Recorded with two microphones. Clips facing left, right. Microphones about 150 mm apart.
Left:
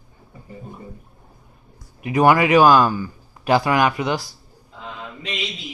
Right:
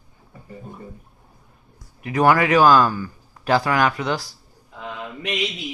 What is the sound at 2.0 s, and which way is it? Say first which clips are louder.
A man's voice: left 2 dB; 15° left (ahead or behind).